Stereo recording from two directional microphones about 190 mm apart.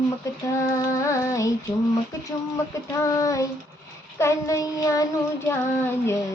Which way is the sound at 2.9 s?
15° left (ahead or behind).